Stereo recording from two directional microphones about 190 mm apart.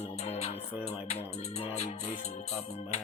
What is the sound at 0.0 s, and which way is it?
Music, 35° left (ahead or behind).